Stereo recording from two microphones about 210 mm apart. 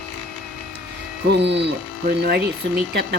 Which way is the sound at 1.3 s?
55° right (ahead or behind).